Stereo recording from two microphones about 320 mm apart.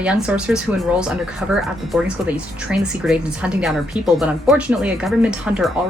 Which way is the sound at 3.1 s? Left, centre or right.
Centre.